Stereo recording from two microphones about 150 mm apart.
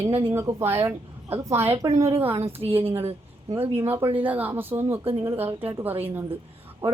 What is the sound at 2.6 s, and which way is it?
Speech, 40° right (ahead or behind).